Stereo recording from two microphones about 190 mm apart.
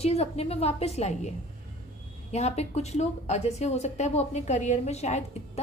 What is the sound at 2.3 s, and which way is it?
A woman's voice, 35° left (ahead or behind).